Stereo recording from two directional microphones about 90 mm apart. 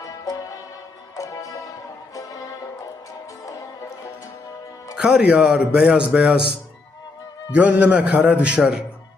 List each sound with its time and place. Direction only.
0.0 s music: 45° left (ahead or behind)
4.9 s a man's voice: 10° right (ahead or behind)
7.5 s a man's voice: 15° right (ahead or behind)